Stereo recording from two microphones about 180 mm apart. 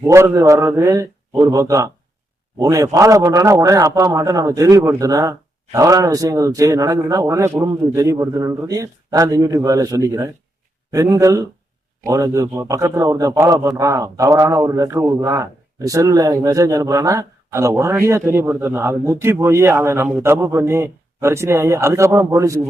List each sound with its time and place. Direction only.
0.0 s a man's voice: 15° right (ahead or behind)